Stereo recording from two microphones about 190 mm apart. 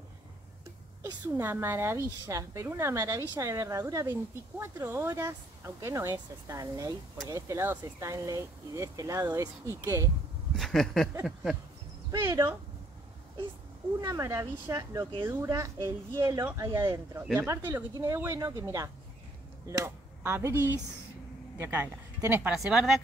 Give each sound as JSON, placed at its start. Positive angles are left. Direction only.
{"t": 1.0, "sound": "a woman's voice", "side_deg": -10}
{"t": 10.5, "sound": "speech", "side_deg": 0}
{"t": 12.1, "sound": "a woman's voice", "side_deg": -20}
{"t": 14.0, "sound": "a woman's voice", "side_deg": -15}